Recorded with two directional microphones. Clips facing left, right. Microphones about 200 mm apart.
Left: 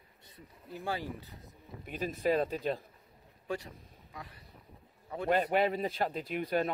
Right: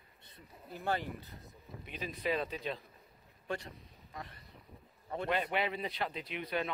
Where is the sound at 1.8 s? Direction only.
45° left (ahead or behind).